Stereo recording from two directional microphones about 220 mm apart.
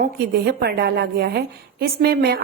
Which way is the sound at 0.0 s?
45° right (ahead or behind).